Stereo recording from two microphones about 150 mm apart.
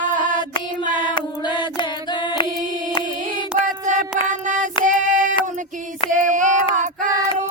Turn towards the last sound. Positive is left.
turn(degrees=-55)  # may be behind; listen again after turning